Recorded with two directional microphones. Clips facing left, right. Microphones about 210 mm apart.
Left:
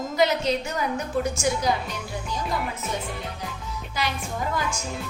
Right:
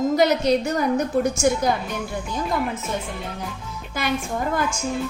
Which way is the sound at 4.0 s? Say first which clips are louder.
Right 2 dB; 50° right (ahead or behind).